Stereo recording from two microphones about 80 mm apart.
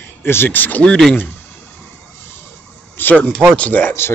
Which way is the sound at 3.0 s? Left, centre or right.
Left.